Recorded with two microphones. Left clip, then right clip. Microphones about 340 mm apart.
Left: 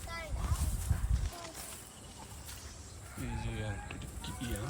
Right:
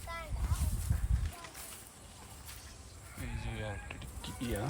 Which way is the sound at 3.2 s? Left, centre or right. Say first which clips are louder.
Even; centre.